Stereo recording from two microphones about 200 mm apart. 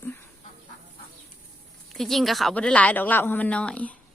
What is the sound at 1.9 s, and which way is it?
Speech, centre (ahead or behind).